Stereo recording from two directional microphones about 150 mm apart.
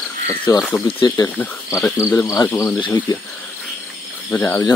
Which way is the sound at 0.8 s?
35° left (ahead or behind).